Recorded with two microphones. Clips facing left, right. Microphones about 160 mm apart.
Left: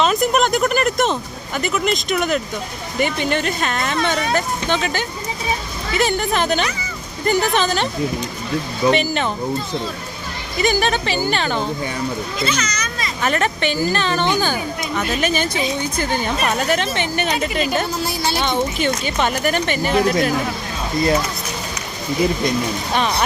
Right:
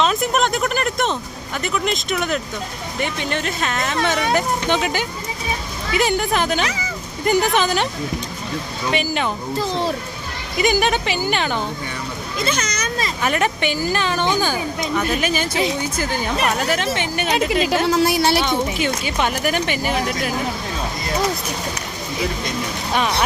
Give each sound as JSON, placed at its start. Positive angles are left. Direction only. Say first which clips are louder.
{"t": 0.0, "sound": "speech", "louder": "left 2 dB", "side_deg": 0}
{"t": 4.3, "sound": "speech", "louder": "right 1 dB", "side_deg": -15}
{"t": 8.9, "sound": "speech", "louder": "left 2 dB", "side_deg": -5}
{"t": 10.6, "sound": "speech", "louder": "even", "side_deg": -15}
{"t": 12.4, "sound": "a child's voice", "louder": "right 2 dB", "side_deg": -50}
{"t": 13.2, "sound": "speech", "louder": "left 1 dB", "side_deg": -10}
{"t": 17.5, "sound": "speech", "louder": "right 3 dB", "side_deg": -90}
{"t": 17.8, "sound": "speech", "louder": "right 6 dB", "side_deg": -80}
{"t": 18.3, "sound": "speech", "louder": "even", "side_deg": -10}